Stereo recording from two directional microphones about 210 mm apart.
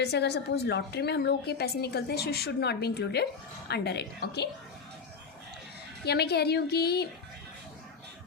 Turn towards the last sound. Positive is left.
turn(degrees=50)  # may be behind; listen again after turning